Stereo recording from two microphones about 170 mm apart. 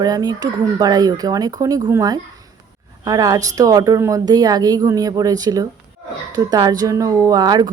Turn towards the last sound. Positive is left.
turn(degrees=-25)  # may be behind; listen again after turning